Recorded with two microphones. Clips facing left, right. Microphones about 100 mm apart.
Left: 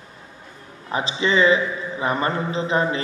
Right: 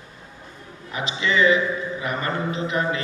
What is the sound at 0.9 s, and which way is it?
A man's voice, 30° left (ahead or behind).